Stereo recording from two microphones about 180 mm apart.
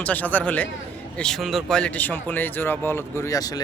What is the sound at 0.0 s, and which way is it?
Speech, 10° left (ahead or behind).